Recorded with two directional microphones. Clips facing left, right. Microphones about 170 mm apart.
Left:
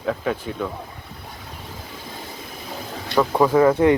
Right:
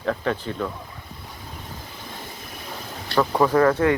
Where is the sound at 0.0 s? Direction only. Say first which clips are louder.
Left 1 dB; 5° left (ahead or behind).